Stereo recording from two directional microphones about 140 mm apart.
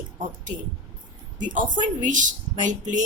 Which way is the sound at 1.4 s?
70° right (ahead or behind).